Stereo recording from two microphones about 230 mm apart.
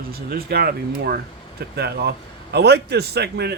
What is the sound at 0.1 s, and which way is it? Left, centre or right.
A man's voice, right.